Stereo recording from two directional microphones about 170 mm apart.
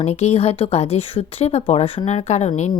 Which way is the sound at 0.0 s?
40° left (ahead or behind).